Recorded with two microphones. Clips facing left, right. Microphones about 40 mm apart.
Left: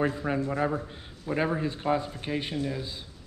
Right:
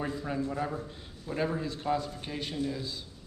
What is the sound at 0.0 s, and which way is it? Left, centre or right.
A man's voice, left.